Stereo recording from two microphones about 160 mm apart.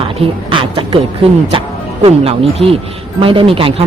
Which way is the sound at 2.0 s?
35° right (ahead or behind).